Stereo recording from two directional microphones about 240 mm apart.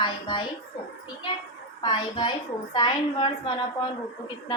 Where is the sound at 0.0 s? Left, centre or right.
Centre.